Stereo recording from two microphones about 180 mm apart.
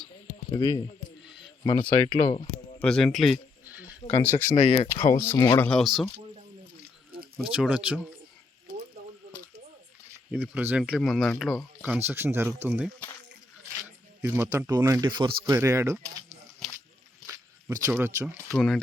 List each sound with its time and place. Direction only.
0.5 s speech: 20° left (ahead or behind)
1.2 s a sound: centre (ahead or behind)
1.8 s speech: 30° left (ahead or behind)
2.8 s speech: 5° left (ahead or behind)
4.4 s speech: 40° left (ahead or behind)
5.0 s speech: 15° left (ahead or behind)
7.3 s speech: 5° right (ahead or behind)
10.3 s speech: 10° right (ahead or behind)
11.8 s speech: 10° right (ahead or behind)
14.2 s speech: 15° right (ahead or behind)
16.6 s a sound: centre (ahead or behind)
17.2 s a sound: 15° right (ahead or behind)
18.5 s speech: centre (ahead or behind)